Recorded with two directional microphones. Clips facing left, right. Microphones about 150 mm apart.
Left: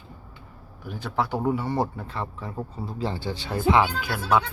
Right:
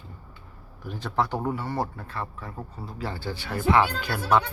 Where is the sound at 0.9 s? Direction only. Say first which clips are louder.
Even; centre (ahead or behind).